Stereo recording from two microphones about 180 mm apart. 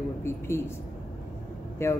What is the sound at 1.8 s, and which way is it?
Speech, 15° left (ahead or behind).